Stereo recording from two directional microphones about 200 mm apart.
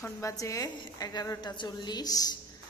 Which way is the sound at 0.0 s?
15° left (ahead or behind).